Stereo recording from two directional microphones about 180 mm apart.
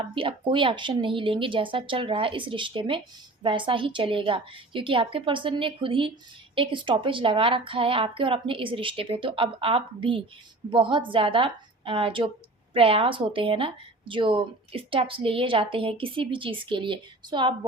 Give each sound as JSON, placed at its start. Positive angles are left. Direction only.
{"t": 0.1, "sound": "a woman's voice", "side_deg": -30}